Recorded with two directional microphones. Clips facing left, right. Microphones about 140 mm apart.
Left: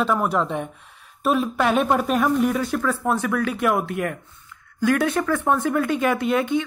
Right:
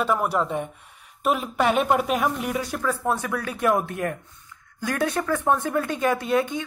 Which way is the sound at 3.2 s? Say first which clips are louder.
Left 6 dB; 30° right (ahead or behind).